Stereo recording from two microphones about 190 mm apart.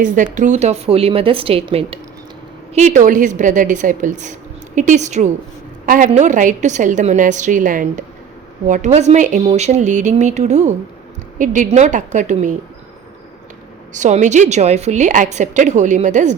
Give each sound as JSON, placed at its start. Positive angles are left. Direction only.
{"t": 0.0, "sound": "a woman's voice", "side_deg": -45}
{"t": 13.9, "sound": "a woman's voice", "side_deg": -40}